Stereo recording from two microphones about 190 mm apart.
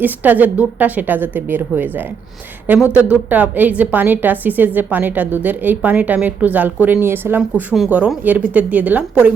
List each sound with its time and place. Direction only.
0.0 s a woman's voice: 10° right (ahead or behind)